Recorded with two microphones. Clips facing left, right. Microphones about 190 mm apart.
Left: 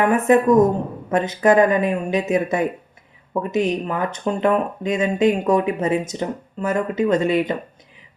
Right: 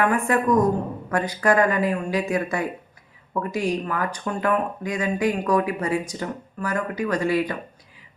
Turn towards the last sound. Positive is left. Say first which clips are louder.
# left 4 dB
turn(degrees=20)  # may be behind; listen again after turning